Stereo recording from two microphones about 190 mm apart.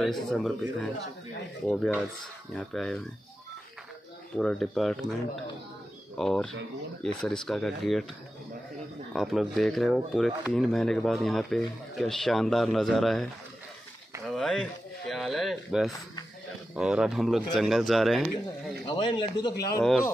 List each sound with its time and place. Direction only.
0.0 s speech: centre (ahead or behind)
4.4 s speech: centre (ahead or behind)
9.1 s speech: centre (ahead or behind)
18.9 s speech: 25° left (ahead or behind)